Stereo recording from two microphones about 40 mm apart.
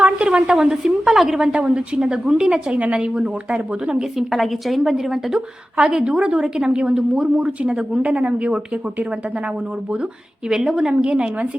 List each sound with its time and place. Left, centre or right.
0.0 s a woman's voice: right
2.7 s a woman's voice: right
4.2 s a woman's voice: centre; by 8.5 s right
10.5 s a woman's voice: centre